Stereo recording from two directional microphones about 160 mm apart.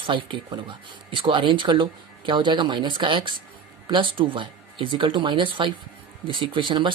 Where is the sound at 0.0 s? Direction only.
30° right (ahead or behind).